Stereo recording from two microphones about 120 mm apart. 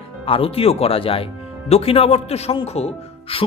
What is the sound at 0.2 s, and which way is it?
Speech, 50° left (ahead or behind).